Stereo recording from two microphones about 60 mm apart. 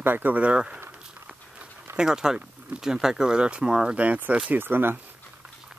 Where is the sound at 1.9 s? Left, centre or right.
Centre.